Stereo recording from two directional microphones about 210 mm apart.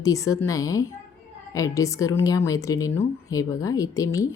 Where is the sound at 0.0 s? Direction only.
15° left (ahead or behind).